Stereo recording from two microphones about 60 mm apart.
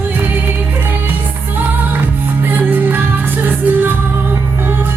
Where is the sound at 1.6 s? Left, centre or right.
Right.